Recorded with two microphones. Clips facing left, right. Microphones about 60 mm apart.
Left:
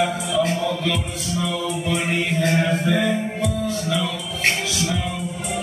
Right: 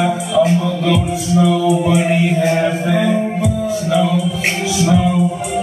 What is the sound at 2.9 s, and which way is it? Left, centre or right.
Music, centre.